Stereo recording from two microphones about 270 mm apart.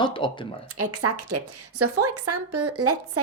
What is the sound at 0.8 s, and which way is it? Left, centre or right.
A woman's voice, right.